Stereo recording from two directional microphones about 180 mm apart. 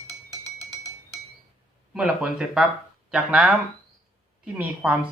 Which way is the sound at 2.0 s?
5° right (ahead or behind).